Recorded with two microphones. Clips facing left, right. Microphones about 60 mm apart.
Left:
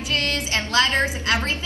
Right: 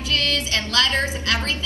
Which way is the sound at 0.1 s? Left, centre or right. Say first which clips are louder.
Right 1 dB; left.